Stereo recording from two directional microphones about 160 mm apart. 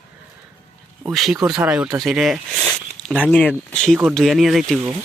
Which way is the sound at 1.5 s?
10° right (ahead or behind).